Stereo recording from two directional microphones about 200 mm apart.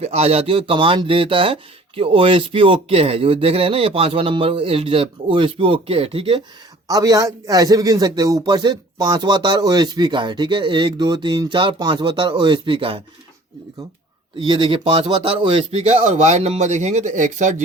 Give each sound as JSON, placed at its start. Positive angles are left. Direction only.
{"t": 0.0, "sound": "speech", "side_deg": -30}
{"t": 14.3, "sound": "speech", "side_deg": -25}